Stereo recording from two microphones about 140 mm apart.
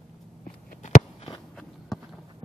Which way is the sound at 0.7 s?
65° left (ahead or behind).